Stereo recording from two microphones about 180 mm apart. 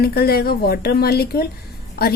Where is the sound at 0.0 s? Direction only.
60° left (ahead or behind).